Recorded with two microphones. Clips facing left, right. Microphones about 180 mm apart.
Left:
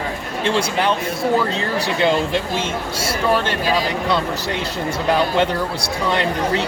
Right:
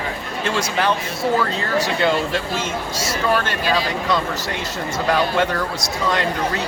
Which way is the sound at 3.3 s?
15° left (ahead or behind).